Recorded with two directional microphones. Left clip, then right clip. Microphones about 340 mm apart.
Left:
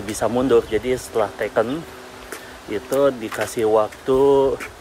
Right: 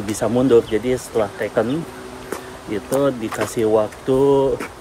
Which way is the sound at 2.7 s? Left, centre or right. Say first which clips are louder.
Left 1 dB; centre.